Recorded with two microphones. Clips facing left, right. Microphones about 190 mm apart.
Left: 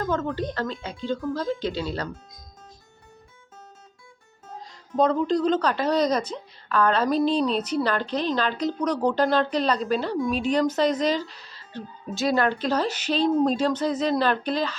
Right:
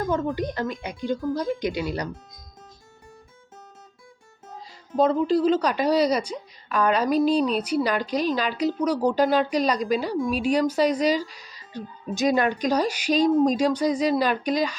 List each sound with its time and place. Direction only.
0.0 s a woman's voice: 15° right (ahead or behind)
4.9 s a woman's voice: 5° right (ahead or behind)